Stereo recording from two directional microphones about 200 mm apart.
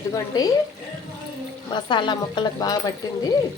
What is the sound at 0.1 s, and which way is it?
Speech, 20° left (ahead or behind).